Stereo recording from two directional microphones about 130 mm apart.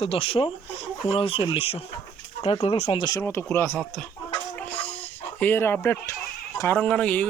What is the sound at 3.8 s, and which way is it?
Speech, 5° left (ahead or behind).